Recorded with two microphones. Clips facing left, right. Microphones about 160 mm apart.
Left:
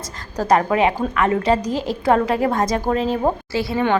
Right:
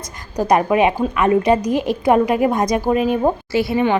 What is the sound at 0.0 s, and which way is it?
A woman's voice, 15° right (ahead or behind).